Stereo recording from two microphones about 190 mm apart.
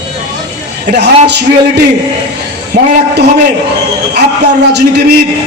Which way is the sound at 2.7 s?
60° right (ahead or behind).